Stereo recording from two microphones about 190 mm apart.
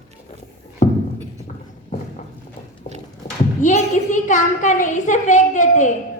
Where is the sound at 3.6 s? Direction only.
40° left (ahead or behind).